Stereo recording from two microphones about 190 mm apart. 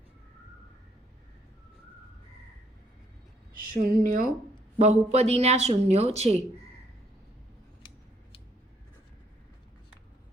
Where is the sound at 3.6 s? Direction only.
50° right (ahead or behind).